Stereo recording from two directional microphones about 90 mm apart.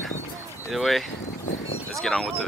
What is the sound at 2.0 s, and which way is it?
Speech, 5° left (ahead or behind).